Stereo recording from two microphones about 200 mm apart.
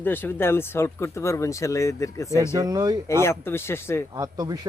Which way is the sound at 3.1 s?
15° left (ahead or behind).